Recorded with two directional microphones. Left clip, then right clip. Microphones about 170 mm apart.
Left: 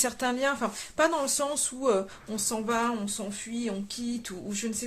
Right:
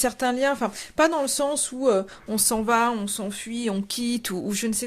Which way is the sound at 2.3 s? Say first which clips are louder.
Right 7 dB; 55° right (ahead or behind).